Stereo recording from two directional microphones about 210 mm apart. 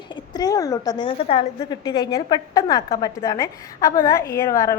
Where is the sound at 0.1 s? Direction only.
20° left (ahead or behind).